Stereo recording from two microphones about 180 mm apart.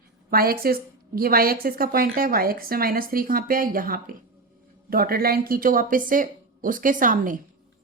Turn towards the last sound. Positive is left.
turn(degrees=-50)  # may be behind; listen again after turning